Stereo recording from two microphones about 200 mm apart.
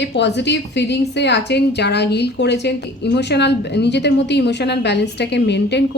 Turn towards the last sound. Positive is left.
turn(degrees=60)  # may be behind; listen again after turning